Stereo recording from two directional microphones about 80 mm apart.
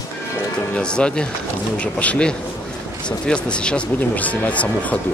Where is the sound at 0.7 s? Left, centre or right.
Centre.